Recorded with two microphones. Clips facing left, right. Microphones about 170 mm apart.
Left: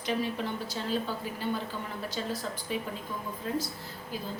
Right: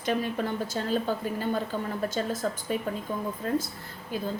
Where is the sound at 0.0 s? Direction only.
50° right (ahead or behind).